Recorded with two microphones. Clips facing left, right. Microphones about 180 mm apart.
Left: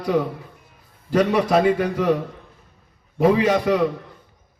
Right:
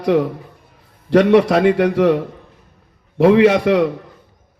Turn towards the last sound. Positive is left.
turn(degrees=-80)